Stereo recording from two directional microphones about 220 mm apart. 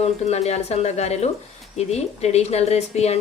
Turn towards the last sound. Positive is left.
turn(degrees=30)  # may be behind; listen again after turning